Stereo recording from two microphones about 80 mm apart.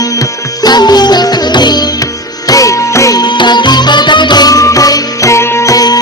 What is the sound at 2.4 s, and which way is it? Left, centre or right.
Music, left.